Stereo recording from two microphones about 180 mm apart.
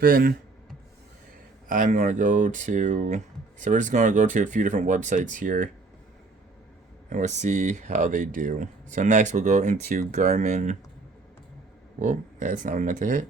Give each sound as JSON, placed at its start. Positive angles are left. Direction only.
{"t": 0.0, "sound": "speech", "side_deg": -55}
{"t": 1.6, "sound": "speech", "side_deg": -45}
{"t": 7.1, "sound": "speech", "side_deg": -40}
{"t": 11.9, "sound": "speech", "side_deg": -45}